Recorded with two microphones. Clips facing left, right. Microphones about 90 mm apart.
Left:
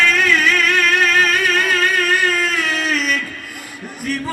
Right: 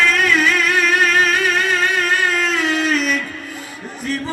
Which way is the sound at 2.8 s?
35° right (ahead or behind).